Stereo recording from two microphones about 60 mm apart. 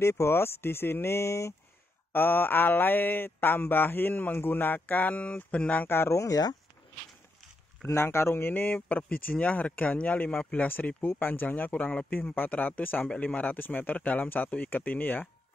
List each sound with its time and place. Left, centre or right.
0.0 s speech: left
2.1 s speech: left
6.1 s speech: left
8.0 s a man's voice: left
10.3 s speech: centre
10.6 s a man's voice: left